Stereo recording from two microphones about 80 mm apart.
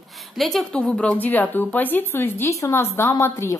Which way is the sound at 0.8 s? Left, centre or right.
Centre.